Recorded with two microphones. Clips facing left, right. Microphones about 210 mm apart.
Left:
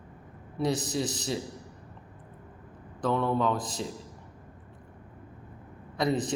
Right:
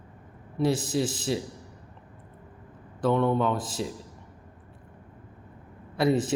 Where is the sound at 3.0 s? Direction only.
Centre (ahead or behind).